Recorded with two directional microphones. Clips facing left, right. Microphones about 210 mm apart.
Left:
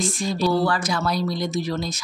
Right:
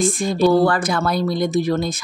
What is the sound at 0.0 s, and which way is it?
Speech, 55° right (ahead or behind).